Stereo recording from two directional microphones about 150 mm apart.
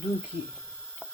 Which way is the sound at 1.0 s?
Centre (ahead or behind).